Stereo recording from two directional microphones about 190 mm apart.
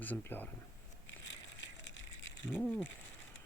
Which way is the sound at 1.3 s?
70° left (ahead or behind).